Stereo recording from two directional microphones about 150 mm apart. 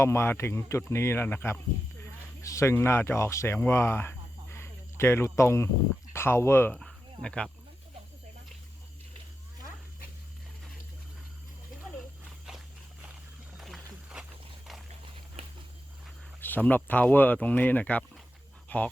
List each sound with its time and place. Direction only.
0.0 s speech: 15° left (ahead or behind)
6.7 s cricket: 5° left (ahead or behind)
12.5 s a sound: 5° right (ahead or behind)
13.6 s wild animals: centre (ahead or behind)
16.4 s speech: 10° left (ahead or behind)